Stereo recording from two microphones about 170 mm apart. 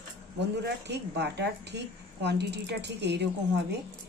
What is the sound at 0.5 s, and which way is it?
Speech, 85° right.